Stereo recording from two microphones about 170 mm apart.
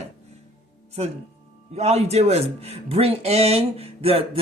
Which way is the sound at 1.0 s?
40° right (ahead or behind).